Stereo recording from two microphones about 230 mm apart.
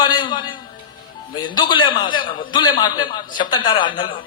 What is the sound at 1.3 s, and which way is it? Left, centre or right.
A man's voice, centre.